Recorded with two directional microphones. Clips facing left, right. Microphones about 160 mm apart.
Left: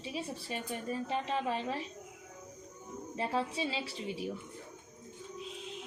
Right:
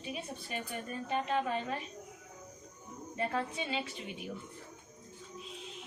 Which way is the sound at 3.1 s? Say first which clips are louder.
Left 1 dB; 30° left (ahead or behind).